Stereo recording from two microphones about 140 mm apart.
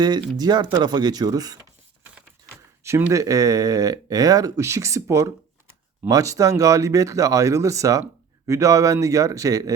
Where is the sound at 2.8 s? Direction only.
15° right (ahead or behind).